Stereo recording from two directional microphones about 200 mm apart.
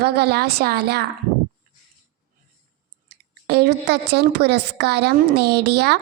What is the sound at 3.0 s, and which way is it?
A woman's voice, 55° right (ahead or behind).